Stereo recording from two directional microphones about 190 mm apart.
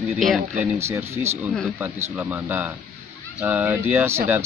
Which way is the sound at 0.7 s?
15° right (ahead or behind).